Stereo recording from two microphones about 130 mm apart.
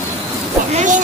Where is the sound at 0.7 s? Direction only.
75° right (ahead or behind).